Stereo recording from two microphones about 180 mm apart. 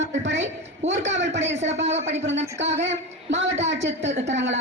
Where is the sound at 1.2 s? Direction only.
85° right.